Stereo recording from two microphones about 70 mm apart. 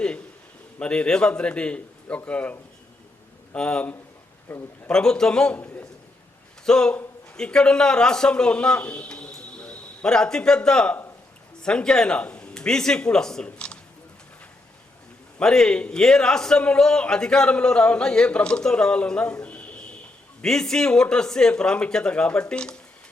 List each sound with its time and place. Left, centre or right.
0.8 s a man's voice: centre
4.9 s a man's voice: centre
5.5 s a man's voice: left
6.7 s a man's voice: centre
15.4 s a man's voice: centre